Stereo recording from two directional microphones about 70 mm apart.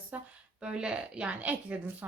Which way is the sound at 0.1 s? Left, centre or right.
Right.